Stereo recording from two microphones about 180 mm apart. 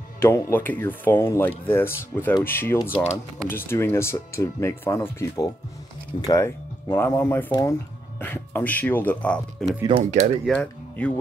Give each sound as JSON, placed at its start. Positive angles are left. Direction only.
{"t": 0.2, "sound": "speech", "side_deg": 15}
{"t": 2.8, "sound": "speech", "side_deg": 35}
{"t": 3.4, "sound": "speech", "side_deg": 15}
{"t": 9.8, "sound": "speech", "side_deg": -30}
{"t": 10.4, "sound": "speech", "side_deg": 5}